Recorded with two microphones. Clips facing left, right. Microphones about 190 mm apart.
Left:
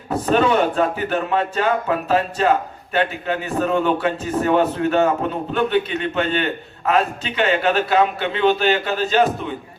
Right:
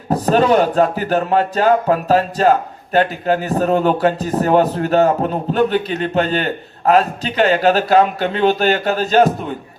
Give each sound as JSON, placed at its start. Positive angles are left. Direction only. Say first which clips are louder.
{"t": 0.1, "sound": "speech", "louder": "right 4 dB", "side_deg": -40}